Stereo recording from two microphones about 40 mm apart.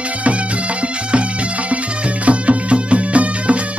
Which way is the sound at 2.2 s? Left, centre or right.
Right.